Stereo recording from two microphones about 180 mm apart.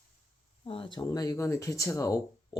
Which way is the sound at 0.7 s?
30° left (ahead or behind).